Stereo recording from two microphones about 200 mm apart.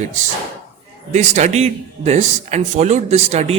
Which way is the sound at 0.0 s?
35° right (ahead or behind).